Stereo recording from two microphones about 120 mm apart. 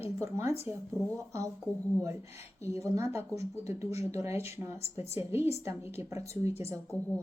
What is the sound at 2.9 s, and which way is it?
A woman's voice, 20° right (ahead or behind).